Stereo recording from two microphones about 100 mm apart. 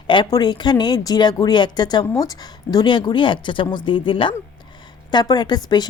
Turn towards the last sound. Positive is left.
turn(degrees=45)  # may be behind; listen again after turning